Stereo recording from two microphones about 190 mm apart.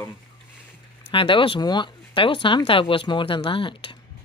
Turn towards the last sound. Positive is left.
turn(degrees=25)  # may be behind; listen again after turning